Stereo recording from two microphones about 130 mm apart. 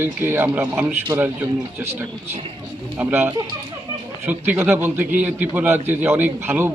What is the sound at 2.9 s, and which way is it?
A man's voice, 15° right (ahead or behind).